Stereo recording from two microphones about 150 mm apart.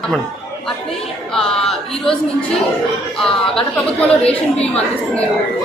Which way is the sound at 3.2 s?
5° left (ahead or behind).